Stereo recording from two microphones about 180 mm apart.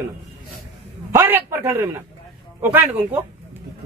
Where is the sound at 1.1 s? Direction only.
10° right (ahead or behind).